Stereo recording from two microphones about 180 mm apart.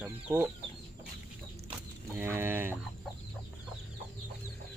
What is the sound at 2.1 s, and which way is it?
Speech, 15° right (ahead or behind).